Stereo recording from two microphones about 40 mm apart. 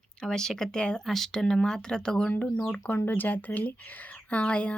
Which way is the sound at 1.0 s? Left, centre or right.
Centre.